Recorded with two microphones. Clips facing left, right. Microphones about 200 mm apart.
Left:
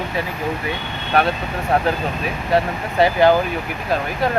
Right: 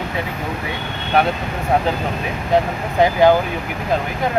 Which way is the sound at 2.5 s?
15° right (ahead or behind).